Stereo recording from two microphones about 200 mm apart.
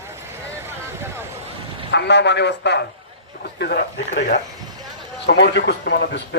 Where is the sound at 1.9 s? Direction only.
60° left (ahead or behind).